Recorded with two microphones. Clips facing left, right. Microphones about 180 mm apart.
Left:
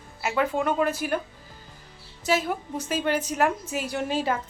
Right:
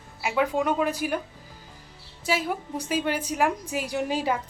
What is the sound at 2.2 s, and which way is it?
A woman's voice, 10° right (ahead or behind).